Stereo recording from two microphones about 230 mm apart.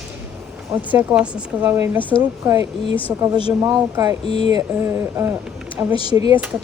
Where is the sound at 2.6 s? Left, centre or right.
Left.